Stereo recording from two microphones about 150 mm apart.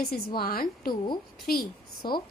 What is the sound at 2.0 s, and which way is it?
Speech, 30° left (ahead or behind).